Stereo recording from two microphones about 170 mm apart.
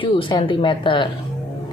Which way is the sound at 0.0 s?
30° left (ahead or behind).